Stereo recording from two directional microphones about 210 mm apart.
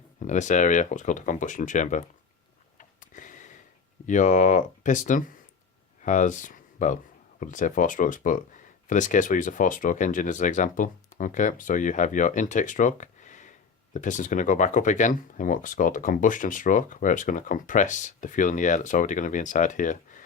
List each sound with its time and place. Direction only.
0.2 s speech: 35° left (ahead or behind)
2.7 s a sound: 40° left (ahead or behind)
4.0 s speech: 35° left (ahead or behind)